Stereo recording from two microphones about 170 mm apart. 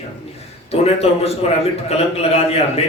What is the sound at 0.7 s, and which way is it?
A man's voice, 35° left (ahead or behind).